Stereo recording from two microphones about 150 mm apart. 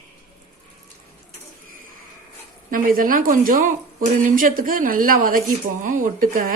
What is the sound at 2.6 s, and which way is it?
A woman's voice, 65° right (ahead or behind).